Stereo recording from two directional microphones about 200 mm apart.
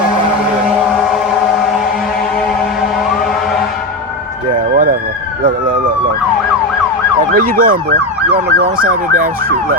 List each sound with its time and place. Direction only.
5.4 s police car: 45° right (ahead or behind)
7.3 s emergency vehicle: 45° right (ahead or behind)